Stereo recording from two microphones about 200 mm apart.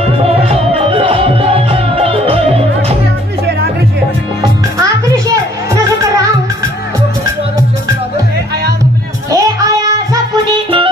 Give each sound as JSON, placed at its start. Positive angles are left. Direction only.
{"t": 0.5, "sound": "music", "side_deg": -30}
{"t": 4.4, "sound": "music", "side_deg": -15}
{"t": 9.3, "sound": "music", "side_deg": -15}